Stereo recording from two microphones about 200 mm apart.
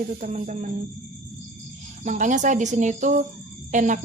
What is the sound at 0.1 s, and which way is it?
Speech, 40° right (ahead or behind).